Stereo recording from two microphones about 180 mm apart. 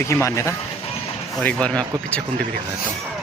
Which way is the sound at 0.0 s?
15° left (ahead or behind).